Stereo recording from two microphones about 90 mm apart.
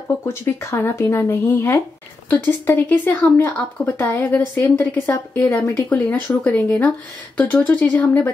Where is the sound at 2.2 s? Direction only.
20° left (ahead or behind).